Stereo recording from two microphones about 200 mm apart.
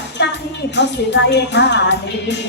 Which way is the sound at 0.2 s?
60° left (ahead or behind).